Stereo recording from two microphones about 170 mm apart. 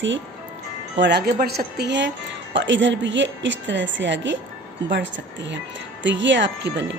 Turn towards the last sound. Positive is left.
turn(degrees=-90)